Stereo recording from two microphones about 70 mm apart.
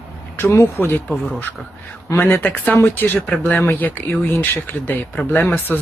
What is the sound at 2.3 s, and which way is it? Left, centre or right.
Speech, left.